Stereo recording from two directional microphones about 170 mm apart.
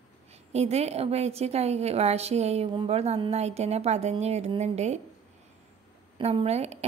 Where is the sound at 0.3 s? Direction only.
40° right (ahead or behind).